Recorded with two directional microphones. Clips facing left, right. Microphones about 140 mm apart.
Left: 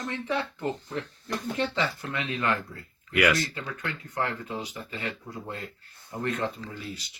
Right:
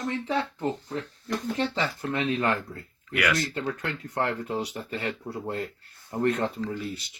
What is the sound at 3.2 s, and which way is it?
Speech, 10° left (ahead or behind).